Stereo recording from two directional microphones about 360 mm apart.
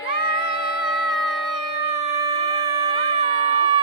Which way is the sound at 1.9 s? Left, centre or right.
Centre.